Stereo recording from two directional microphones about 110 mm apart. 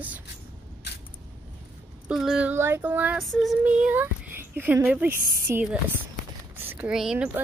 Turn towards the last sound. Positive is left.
turn(degrees=-10)  # may be behind; listen again after turning